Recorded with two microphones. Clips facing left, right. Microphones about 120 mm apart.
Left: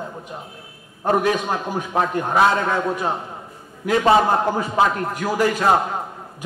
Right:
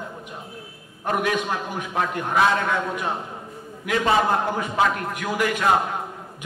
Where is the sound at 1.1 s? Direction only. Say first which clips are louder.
Left 4 dB; 35° left (ahead or behind).